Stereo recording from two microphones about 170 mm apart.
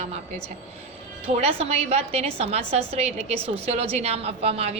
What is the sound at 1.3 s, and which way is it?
A woman's voice, 35° right (ahead or behind).